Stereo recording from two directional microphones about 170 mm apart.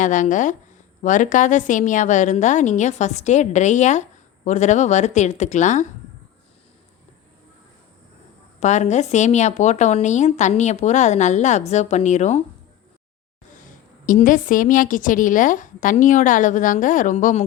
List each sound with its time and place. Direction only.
0.0 s a woman's voice: 50° left (ahead or behind)
8.6 s a woman's voice: 45° left (ahead or behind)
14.0 s a woman's voice: 50° left (ahead or behind)